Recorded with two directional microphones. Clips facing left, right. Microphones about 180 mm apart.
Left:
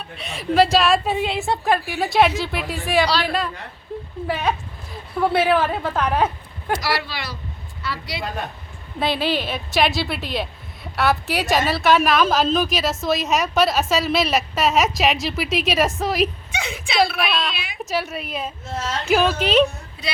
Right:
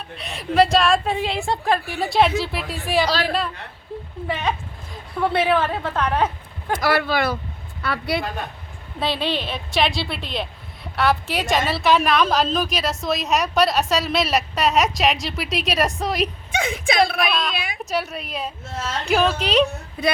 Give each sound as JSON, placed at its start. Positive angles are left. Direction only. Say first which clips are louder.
{"t": 0.2, "sound": "a woman's voice", "louder": "even", "side_deg": 0}
{"t": 3.1, "sound": "speech", "louder": "even", "side_deg": -45}
{"t": 4.3, "sound": "a woman's voice", "louder": "left 2 dB", "side_deg": 5}
{"t": 6.7, "sound": "a woman's voice", "louder": "right 7 dB", "side_deg": -50}
{"t": 9.0, "sound": "a woman's voice", "louder": "left 2 dB", "side_deg": 5}
{"t": 16.5, "sound": "a woman's voice", "louder": "right 5 dB", "side_deg": -50}
{"t": 17.2, "sound": "a woman's voice", "louder": "right 1 dB", "side_deg": 0}